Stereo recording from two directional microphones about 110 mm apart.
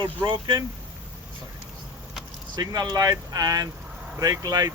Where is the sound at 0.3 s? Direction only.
45° right (ahead or behind).